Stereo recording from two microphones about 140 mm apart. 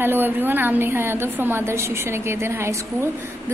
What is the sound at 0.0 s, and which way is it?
A woman's voice, 15° right (ahead or behind).